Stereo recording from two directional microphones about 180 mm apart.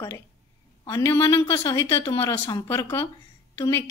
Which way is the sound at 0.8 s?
15° left (ahead or behind).